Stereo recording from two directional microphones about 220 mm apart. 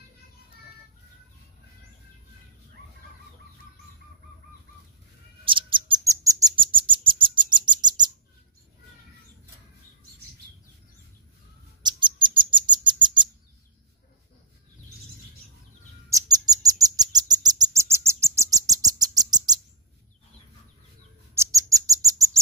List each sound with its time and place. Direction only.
5.4 s bird: 25° right (ahead or behind)
11.8 s bird: 20° right (ahead or behind)
16.1 s bird: 15° right (ahead or behind)
21.4 s bird: 15° right (ahead or behind)